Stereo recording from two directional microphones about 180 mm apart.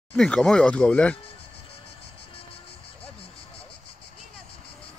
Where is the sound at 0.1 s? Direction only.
5° left (ahead or behind).